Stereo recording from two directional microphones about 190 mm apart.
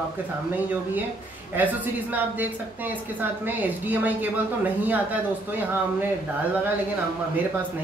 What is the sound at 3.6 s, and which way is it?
Speech, 10° right (ahead or behind).